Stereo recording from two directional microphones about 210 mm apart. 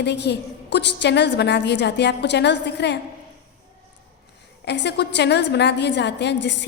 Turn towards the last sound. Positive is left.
turn(degrees=55)  # may be behind; listen again after turning